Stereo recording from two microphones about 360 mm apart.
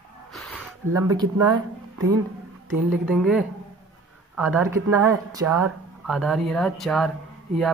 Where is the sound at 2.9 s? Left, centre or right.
Centre.